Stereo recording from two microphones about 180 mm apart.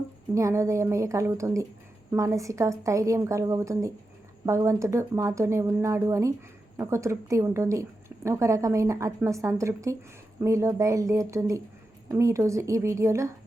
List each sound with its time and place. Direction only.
0.3 s a woman's voice: 15° right (ahead or behind)